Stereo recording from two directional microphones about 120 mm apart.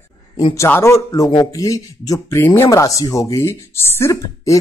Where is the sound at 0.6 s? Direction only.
20° left (ahead or behind).